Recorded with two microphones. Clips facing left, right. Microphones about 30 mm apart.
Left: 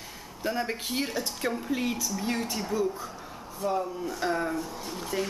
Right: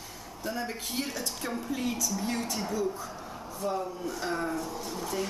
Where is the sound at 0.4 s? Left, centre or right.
Left.